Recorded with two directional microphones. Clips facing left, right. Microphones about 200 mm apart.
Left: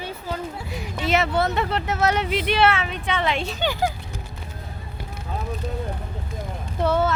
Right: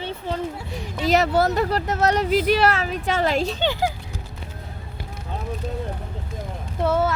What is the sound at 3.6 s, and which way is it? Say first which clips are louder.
Speech: right 1 dB; 20° right (ahead or behind).